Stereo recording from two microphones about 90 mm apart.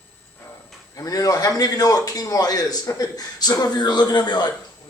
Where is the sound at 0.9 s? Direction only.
40° left (ahead or behind).